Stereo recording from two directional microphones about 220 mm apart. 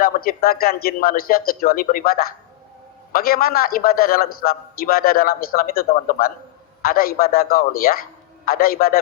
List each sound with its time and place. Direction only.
0.0 s a man's voice: 40° left (ahead or behind)